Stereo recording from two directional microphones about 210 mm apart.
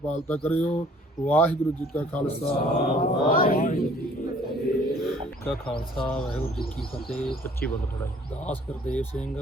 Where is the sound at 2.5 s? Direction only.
45° left (ahead or behind).